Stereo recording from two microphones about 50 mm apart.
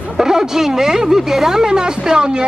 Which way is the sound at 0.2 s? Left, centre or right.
Centre.